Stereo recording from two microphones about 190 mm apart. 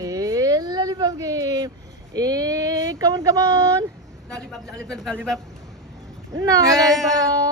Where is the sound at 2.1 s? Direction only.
20° right (ahead or behind).